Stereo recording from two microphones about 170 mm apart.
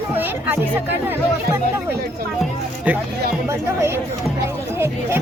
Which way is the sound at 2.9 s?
10° right (ahead or behind).